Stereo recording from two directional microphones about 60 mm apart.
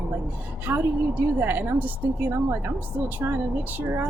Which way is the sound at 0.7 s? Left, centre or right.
Right.